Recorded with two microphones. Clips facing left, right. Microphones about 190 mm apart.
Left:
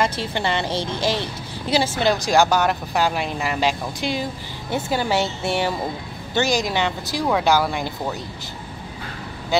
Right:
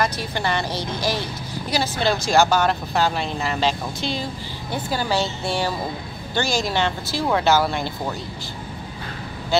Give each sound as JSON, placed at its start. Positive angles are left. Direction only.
{"t": 0.0, "sound": "a woman's voice", "side_deg": 25}
{"t": 9.5, "sound": "a woman's voice", "side_deg": 15}